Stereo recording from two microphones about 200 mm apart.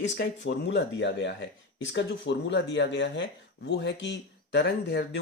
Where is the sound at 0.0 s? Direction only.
60° left (ahead or behind).